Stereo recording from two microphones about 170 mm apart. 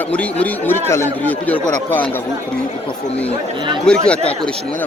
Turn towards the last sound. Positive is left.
turn(degrees=5)  # may be behind; listen again after turning